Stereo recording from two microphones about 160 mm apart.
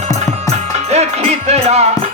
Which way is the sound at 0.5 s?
40° right (ahead or behind).